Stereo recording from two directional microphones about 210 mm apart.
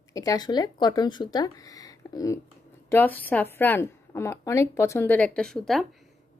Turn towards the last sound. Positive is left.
turn(degrees=0)  # may be behind; listen again after turning